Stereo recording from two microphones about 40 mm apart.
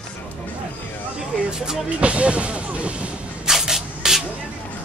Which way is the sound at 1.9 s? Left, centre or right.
Right.